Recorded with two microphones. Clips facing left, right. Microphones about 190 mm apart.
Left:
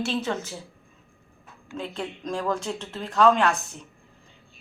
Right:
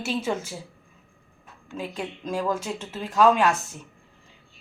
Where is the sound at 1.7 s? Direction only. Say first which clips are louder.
Even; 10° right (ahead or behind).